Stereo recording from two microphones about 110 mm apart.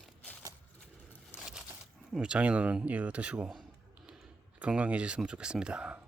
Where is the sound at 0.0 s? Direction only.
10° left (ahead or behind).